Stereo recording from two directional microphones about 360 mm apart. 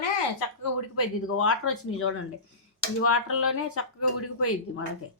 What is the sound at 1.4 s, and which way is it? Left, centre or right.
Speech, left.